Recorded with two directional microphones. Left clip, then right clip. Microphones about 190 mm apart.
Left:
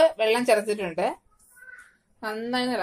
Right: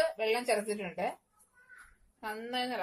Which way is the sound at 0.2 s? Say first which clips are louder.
Left 9 dB; 40° left (ahead or behind).